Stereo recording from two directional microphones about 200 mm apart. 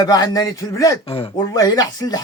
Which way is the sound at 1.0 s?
30° left (ahead or behind).